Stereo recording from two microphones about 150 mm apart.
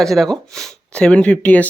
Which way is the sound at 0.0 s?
Centre (ahead or behind).